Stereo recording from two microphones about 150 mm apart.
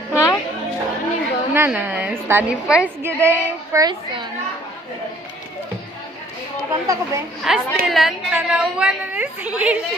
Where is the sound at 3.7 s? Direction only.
25° right (ahead or behind).